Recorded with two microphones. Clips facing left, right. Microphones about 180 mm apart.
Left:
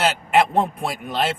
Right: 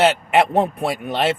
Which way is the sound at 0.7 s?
65° right (ahead or behind).